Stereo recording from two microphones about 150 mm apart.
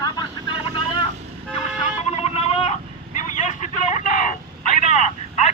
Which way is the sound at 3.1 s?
50° left (ahead or behind).